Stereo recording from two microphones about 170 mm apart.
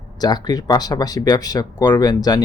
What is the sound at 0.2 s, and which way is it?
Speech, 25° left (ahead or behind).